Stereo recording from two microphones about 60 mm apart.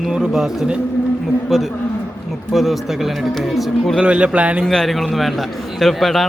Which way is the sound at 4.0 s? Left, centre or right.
Centre.